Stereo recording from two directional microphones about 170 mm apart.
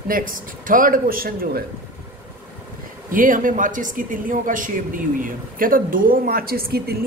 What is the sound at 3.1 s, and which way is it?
Speech, 50° right (ahead or behind).